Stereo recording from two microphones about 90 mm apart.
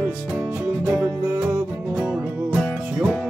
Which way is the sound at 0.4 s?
20° right (ahead or behind).